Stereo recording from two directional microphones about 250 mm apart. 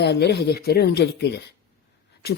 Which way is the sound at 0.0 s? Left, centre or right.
Left.